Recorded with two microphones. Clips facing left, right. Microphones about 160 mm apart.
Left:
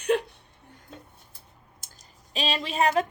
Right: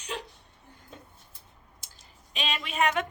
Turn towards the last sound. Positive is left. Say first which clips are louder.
# left 4 dB
turn(degrees=35)  # may be behind; listen again after turning